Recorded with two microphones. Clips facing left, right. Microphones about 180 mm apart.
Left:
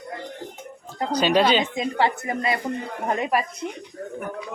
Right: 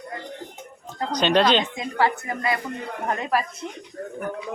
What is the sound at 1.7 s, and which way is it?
A man's voice, 25° left (ahead or behind).